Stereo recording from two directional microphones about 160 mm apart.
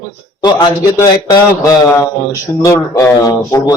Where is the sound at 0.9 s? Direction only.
25° left (ahead or behind).